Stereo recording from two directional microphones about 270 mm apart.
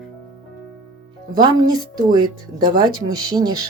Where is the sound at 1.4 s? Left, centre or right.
Centre.